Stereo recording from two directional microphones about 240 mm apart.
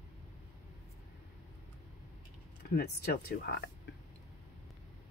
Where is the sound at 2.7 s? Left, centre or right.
Left.